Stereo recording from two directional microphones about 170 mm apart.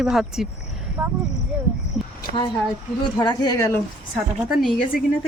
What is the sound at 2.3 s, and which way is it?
Speech, 50° right (ahead or behind).